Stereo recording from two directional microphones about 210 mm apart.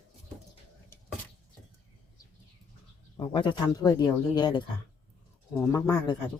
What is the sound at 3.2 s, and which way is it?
Speech, 25° left (ahead or behind).